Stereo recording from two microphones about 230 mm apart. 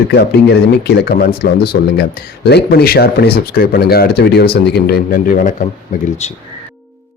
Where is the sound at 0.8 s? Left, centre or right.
Left.